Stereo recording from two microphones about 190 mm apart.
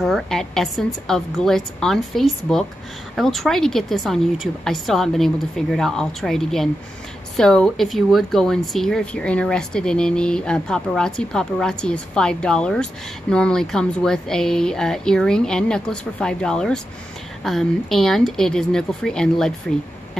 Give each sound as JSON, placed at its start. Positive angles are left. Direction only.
{"t": 0.0, "sound": "speech", "side_deg": 0}